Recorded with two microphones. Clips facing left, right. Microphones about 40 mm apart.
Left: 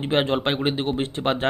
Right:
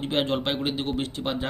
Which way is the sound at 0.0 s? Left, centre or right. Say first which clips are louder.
Left 4 dB; left.